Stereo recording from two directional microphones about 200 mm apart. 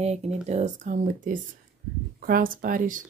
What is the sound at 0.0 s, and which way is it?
Speech, 35° right (ahead or behind).